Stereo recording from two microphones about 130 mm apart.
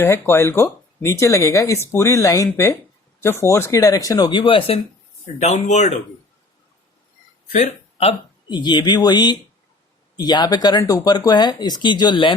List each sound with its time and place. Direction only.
0.0 s speech: 20° left (ahead or behind); by 4.8 s 45° left (ahead or behind)
5.4 s speech: 60° left (ahead or behind)
7.4 s a sound: 65° left (ahead or behind)
8.4 s speech: 35° left (ahead or behind)